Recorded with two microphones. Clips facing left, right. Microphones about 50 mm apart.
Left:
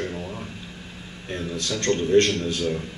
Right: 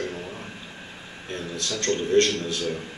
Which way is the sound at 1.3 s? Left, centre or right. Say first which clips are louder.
Left 2 dB; left.